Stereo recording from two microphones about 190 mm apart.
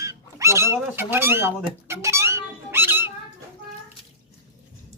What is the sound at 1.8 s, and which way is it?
Cat, 15° right (ahead or behind).